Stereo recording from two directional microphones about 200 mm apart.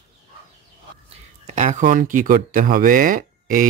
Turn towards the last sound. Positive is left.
turn(degrees=-40)  # may be behind; listen again after turning